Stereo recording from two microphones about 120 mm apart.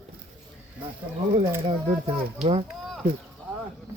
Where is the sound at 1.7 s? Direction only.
50° right (ahead or behind).